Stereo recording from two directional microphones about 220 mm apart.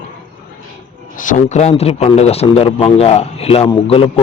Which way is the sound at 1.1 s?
35° left (ahead or behind).